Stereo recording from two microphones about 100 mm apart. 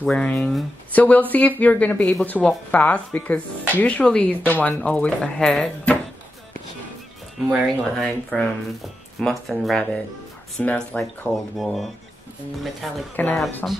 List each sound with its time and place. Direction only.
0.0 s speech: 10° left (ahead or behind)
0.9 s speech: 15° left (ahead or behind)
7.4 s speech: 5° right (ahead or behind); by 11.0 s 15° left (ahead or behind)
11.0 s speech: centre (ahead or behind)
13.1 s speech: 15° left (ahead or behind)